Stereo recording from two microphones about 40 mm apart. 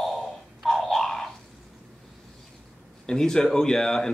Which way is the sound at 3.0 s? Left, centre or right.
Centre.